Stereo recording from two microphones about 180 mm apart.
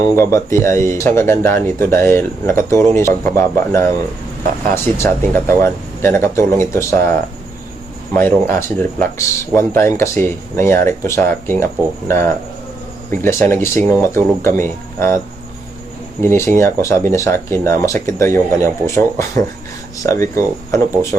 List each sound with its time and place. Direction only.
0.0 s speech: 15° left (ahead or behind)
8.1 s speech: 10° left (ahead or behind)
16.3 s speech: 15° left (ahead or behind)